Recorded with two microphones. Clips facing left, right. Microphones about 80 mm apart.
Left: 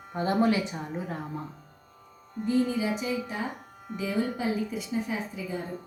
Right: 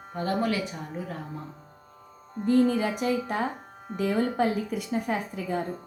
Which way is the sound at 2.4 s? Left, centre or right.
Right.